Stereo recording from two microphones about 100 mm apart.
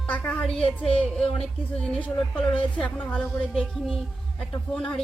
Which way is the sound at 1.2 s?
70° left (ahead or behind).